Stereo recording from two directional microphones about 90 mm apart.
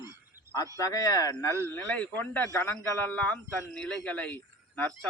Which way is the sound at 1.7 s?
15° left (ahead or behind).